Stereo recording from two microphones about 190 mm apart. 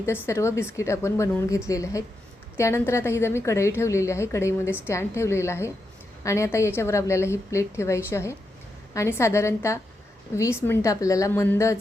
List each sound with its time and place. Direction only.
0.0 s a woman's voice: 15° left (ahead or behind)